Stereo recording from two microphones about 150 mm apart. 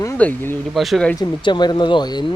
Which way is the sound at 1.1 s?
30° left (ahead or behind).